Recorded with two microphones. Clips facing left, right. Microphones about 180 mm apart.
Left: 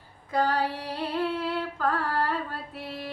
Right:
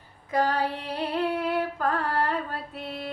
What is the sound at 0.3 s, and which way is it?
Female singing, 20° right (ahead or behind).